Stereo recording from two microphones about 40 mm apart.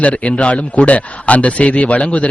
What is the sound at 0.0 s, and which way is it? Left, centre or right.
Speech, left.